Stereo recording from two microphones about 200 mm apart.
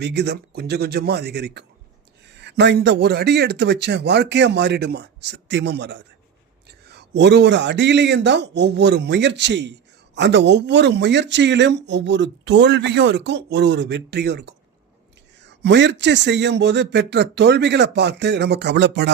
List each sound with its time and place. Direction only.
0.0 s speech: 55° right (ahead or behind)
15.6 s speech: 60° right (ahead or behind)